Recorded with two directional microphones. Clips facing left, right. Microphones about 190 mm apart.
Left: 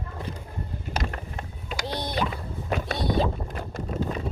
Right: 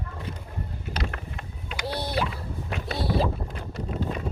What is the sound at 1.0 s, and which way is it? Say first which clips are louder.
Boat: left 2 dB; 40° left (ahead or behind).